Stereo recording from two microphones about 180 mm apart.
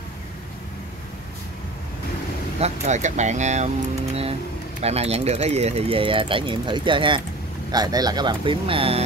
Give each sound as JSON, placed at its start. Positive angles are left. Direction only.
{"t": 2.6, "sound": "speech", "side_deg": -40}